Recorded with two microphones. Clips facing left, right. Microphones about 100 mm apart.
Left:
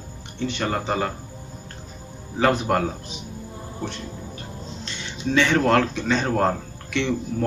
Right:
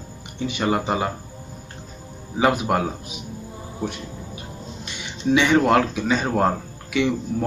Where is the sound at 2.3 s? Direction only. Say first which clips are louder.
Right 1 dB; 10° right (ahead or behind).